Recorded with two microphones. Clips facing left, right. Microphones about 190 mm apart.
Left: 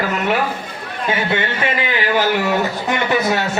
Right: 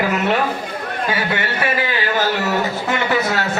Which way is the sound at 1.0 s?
20° left (ahead or behind).